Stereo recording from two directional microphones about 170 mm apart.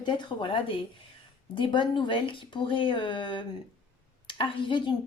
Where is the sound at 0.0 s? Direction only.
30° left (ahead or behind).